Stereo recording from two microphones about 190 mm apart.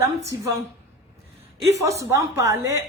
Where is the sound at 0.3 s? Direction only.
15° right (ahead or behind).